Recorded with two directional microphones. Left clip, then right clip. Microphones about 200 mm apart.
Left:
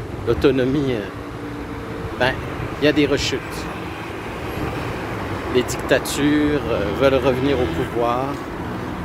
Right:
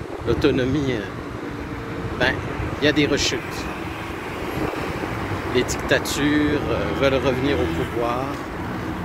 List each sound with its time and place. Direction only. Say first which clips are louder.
0.3 s speech: left 3 dB; 15° left (ahead or behind)
2.8 s speech: left 2 dB; 10° left (ahead or behind)
5.5 s speech: left 2 dB; 15° left (ahead or behind)